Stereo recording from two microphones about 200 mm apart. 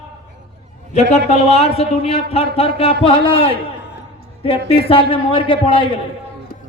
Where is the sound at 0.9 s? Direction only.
35° left (ahead or behind).